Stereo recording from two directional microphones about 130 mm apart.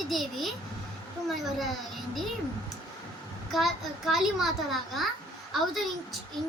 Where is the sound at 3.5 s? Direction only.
Centre (ahead or behind).